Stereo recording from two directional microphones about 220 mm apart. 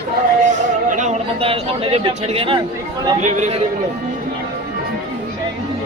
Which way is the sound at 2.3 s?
25° right (ahead or behind).